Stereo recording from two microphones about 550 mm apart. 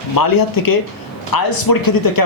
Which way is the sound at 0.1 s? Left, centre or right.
Left.